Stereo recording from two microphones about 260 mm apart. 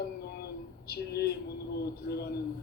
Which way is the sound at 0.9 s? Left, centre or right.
Left.